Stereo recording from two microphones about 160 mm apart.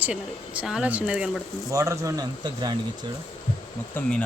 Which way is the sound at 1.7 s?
20° right (ahead or behind).